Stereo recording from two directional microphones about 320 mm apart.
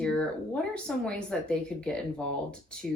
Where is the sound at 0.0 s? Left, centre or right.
Centre.